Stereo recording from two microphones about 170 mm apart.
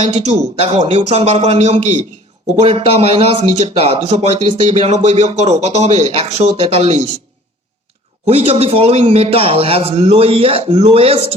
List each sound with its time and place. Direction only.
0.1 s a man's voice: 35° right (ahead or behind)
8.3 s a man's voice: 35° right (ahead or behind)